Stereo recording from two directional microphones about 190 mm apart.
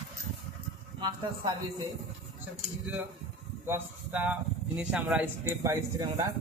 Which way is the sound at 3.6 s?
10° right (ahead or behind).